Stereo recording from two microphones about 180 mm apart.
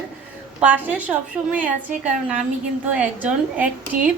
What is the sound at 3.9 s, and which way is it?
Speech, 45° right (ahead or behind).